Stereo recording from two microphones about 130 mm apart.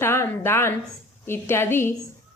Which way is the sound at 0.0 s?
20° left (ahead or behind).